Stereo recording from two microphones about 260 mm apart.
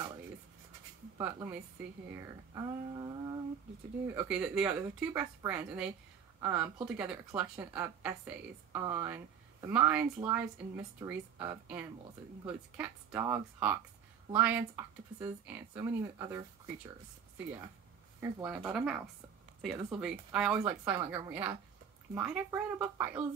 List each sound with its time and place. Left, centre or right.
1.1 s speech: centre
18.2 s speech: centre
21.0 s speech: centre
21.3 s speech: centre